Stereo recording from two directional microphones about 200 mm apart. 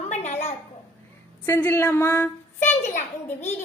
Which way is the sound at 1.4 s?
10° left (ahead or behind).